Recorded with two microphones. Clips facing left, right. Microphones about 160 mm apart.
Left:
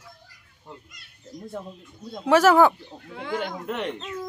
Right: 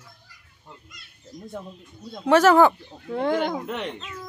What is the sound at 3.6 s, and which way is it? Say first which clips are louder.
Speech: left 1 dB; centre (ahead or behind).